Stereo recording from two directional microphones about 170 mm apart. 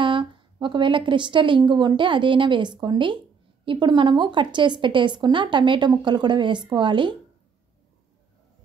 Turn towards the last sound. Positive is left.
turn(degrees=-30)  # may be behind; listen again after turning